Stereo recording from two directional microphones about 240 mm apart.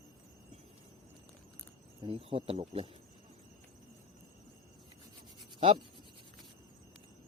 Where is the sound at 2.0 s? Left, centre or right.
Right.